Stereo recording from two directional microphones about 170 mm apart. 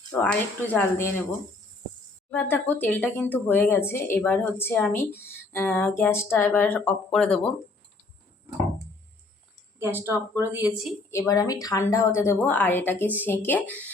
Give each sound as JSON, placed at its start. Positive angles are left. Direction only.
{"t": 0.1, "sound": "a woman's voice", "side_deg": 10}
{"t": 2.3, "sound": "a woman's voice", "side_deg": 10}
{"t": 9.7, "sound": "a woman's voice", "side_deg": -15}
{"t": 11.1, "sound": "a woman's voice", "side_deg": 20}